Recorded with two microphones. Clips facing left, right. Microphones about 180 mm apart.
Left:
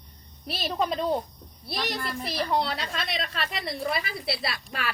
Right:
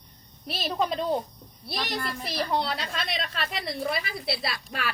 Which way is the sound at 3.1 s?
40° left (ahead or behind).